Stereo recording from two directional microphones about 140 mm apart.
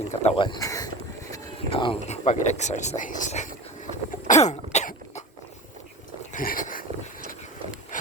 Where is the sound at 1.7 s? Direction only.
40° left (ahead or behind).